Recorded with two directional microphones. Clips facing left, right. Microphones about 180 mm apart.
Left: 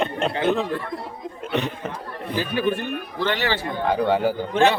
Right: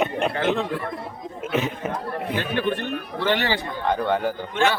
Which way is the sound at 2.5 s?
10° left (ahead or behind).